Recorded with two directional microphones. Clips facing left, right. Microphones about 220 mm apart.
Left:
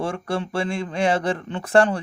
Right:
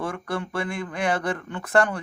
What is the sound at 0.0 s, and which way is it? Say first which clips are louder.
Speech: left 3 dB; 30° left (ahead or behind).